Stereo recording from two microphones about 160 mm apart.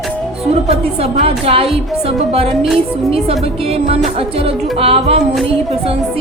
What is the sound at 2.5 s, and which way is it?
Music, centre (ahead or behind).